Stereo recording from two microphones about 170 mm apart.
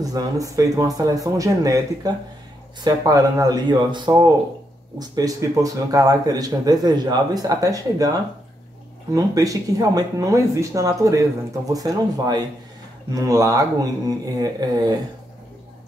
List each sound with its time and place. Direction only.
0.0 s speech: 20° right (ahead or behind)